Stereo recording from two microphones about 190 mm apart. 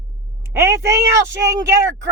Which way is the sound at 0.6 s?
15° right (ahead or behind).